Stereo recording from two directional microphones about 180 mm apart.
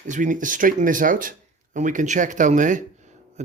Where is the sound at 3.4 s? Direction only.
40° right (ahead or behind).